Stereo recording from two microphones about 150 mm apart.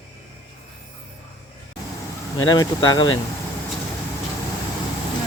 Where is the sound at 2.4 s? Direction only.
25° left (ahead or behind).